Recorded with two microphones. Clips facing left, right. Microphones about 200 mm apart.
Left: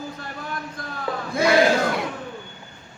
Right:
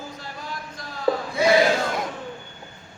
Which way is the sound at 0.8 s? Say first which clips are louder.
Left 4 dB; 55° left (ahead or behind).